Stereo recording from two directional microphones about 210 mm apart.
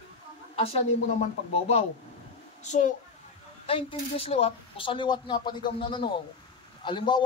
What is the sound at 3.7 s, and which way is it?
A man's voice, 25° left (ahead or behind).